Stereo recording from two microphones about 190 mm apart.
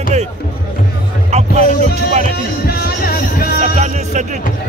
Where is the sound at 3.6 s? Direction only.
40° right (ahead or behind).